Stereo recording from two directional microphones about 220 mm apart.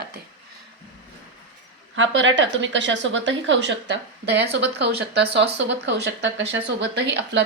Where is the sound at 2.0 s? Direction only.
60° right (ahead or behind).